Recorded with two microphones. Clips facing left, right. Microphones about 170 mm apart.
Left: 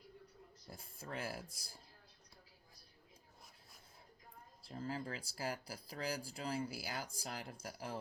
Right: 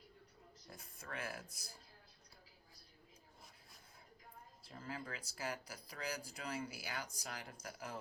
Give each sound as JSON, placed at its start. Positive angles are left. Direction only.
{"t": 0.7, "sound": "speech", "side_deg": 30}
{"t": 4.7, "sound": "speech", "side_deg": 35}